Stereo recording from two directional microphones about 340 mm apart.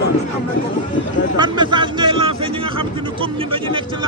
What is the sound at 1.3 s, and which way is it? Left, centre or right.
Speech, centre.